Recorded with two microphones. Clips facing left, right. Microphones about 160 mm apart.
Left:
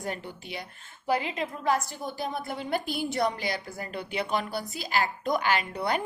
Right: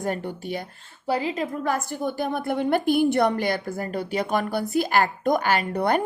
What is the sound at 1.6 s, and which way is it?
A woman's voice, 50° right (ahead or behind).